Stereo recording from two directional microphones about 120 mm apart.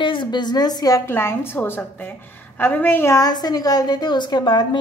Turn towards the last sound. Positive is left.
turn(degrees=35)  # may be behind; listen again after turning